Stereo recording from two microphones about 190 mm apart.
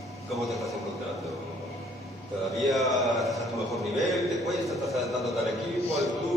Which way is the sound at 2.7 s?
Centre (ahead or behind).